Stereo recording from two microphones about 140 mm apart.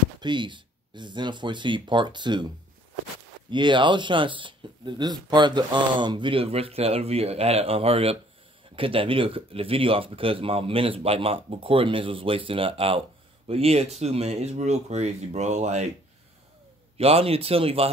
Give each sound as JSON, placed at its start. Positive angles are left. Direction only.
{"t": 0.2, "sound": "speech", "side_deg": -35}
{"t": 16.9, "sound": "speech", "side_deg": -45}